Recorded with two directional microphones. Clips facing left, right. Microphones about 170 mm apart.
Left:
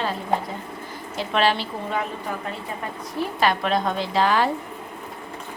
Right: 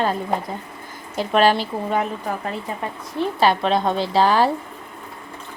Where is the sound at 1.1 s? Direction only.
45° right (ahead or behind).